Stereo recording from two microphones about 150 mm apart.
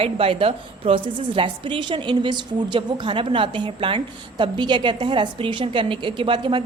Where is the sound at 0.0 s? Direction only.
40° right (ahead or behind).